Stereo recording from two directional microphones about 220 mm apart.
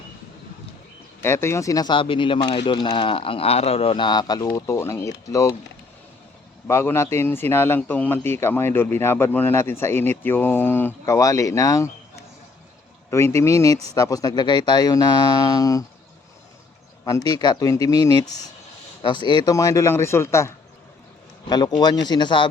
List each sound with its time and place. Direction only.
1.2 s a man's voice: 10° left (ahead or behind)
6.7 s a man's voice: 10° left (ahead or behind)
13.1 s a man's voice: 10° left (ahead or behind)
17.0 s a man's voice: 15° left (ahead or behind)
21.5 s speech: 20° left (ahead or behind)